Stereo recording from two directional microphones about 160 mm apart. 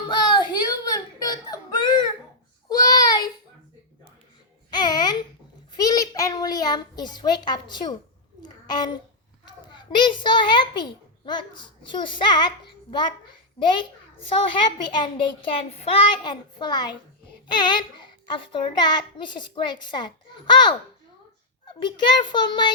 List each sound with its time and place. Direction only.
0.1 s whimper: 30° left (ahead or behind)
2.6 s child singing: 20° left (ahead or behind)
4.8 s a sound: 25° left (ahead or behind)
9.7 s a child's voice: 30° left (ahead or behind)
14.8 s a child's voice: 25° left (ahead or behind)
21.8 s a child's voice: 30° left (ahead or behind)